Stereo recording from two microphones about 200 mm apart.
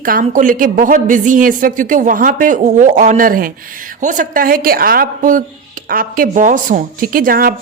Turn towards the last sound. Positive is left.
turn(degrees=-45)  # may be behind; listen again after turning